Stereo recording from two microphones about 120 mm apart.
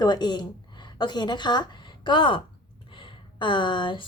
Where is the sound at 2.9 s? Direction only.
45° left (ahead or behind).